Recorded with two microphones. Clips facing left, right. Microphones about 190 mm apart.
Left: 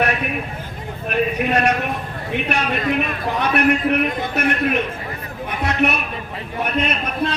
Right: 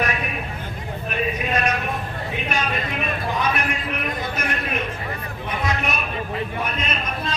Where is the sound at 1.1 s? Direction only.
65° left (ahead or behind).